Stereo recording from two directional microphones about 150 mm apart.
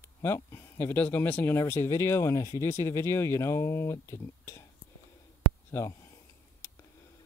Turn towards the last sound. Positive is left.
turn(degrees=20)  # may be behind; listen again after turning